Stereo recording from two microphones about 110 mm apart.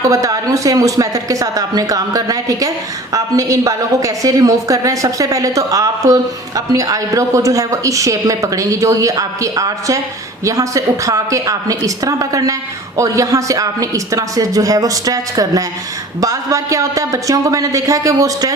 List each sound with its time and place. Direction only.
0.0 s a woman's voice: 30° right (ahead or behind)